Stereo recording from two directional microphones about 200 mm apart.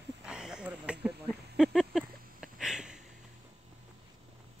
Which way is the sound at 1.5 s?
Centre (ahead or behind).